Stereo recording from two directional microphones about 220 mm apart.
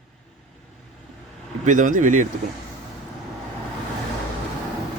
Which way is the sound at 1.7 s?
35° right (ahead or behind).